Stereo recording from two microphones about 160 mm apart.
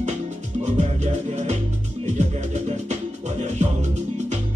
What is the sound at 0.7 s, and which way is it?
Music, 45° right (ahead or behind).